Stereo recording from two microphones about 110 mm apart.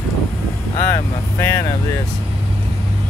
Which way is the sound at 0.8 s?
25° left (ahead or behind).